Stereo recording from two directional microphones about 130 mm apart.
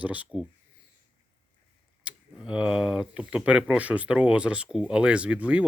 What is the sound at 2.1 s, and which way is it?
Speech, 5° right (ahead or behind).